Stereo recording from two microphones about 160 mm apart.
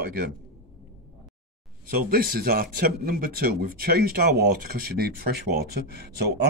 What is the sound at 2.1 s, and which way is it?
Speech, 70° right (ahead or behind).